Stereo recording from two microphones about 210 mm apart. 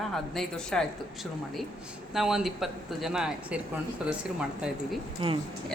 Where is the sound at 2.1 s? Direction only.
Centre (ahead or behind).